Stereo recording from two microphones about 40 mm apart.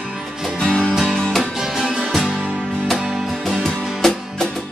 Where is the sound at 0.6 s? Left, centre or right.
Left.